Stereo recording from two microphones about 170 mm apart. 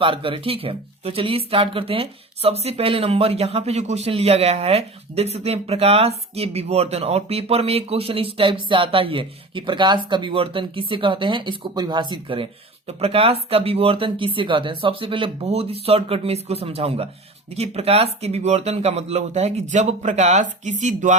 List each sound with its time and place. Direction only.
0.0 s speech: 30° right (ahead or behind)